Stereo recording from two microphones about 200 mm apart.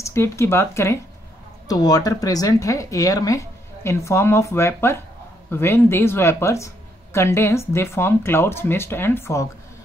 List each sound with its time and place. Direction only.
0.0 s speech: 15° left (ahead or behind)